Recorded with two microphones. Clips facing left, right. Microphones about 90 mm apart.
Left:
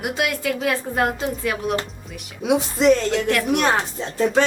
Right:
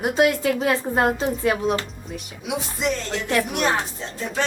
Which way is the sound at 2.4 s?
65° left (ahead or behind).